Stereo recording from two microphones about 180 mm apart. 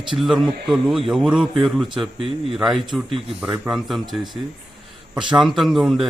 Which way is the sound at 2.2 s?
30° right (ahead or behind).